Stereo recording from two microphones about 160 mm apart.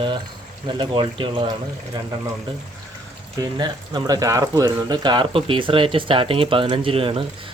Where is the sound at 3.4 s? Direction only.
25° right (ahead or behind).